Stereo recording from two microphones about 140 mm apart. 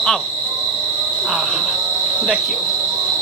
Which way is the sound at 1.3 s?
Centre (ahead or behind).